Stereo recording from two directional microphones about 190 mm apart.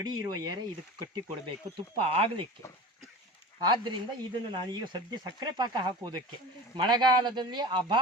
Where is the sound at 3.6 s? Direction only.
25° right (ahead or behind).